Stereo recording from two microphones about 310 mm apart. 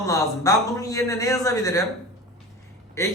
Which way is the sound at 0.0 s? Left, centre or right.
Centre.